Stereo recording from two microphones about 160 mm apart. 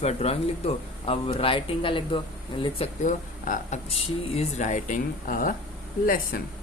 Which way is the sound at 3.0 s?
55° left (ahead or behind).